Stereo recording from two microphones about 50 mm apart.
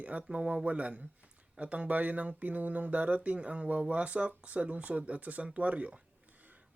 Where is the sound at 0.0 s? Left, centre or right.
Right.